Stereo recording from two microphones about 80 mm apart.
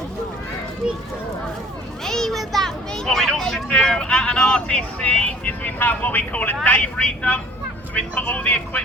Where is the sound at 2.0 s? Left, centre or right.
Centre.